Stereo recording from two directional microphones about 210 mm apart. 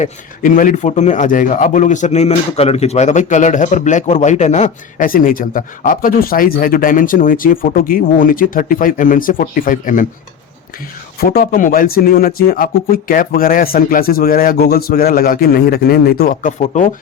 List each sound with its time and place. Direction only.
0.0 s speech: 40° left (ahead or behind)
11.2 s speech: 45° left (ahead or behind)